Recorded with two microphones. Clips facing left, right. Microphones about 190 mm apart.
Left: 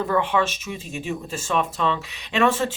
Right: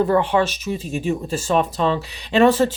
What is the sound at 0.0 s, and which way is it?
Speech, 35° right (ahead or behind).